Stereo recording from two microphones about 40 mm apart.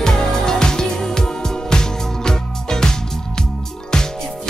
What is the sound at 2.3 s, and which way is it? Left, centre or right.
Music, centre.